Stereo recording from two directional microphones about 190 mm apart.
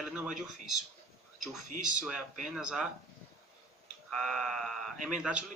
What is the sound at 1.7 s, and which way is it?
Speech, 40° right (ahead or behind).